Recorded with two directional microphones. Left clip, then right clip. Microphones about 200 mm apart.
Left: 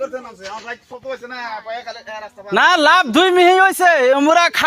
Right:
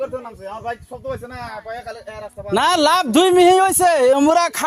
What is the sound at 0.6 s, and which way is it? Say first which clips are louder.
Speech: right 5 dB; 30° left (ahead or behind).